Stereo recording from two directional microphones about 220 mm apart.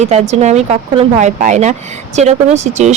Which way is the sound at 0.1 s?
30° right (ahead or behind).